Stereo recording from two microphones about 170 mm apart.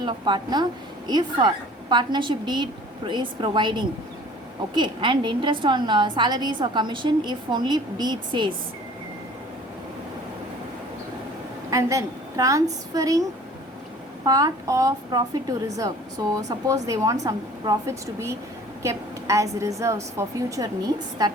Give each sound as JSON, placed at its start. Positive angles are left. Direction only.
{"t": 0.0, "sound": "a woman's voice", "side_deg": -25}
{"t": 11.7, "sound": "a woman's voice", "side_deg": -20}
{"t": 14.3, "sound": "a woman's voice", "side_deg": -20}